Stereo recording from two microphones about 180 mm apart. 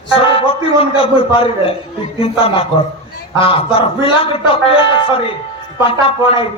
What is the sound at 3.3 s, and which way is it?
A man's voice, 30° left (ahead or behind).